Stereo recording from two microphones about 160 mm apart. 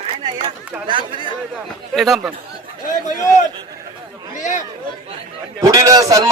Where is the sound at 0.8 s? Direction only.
30° right (ahead or behind).